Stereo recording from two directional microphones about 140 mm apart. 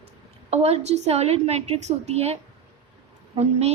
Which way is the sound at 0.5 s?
50° right (ahead or behind).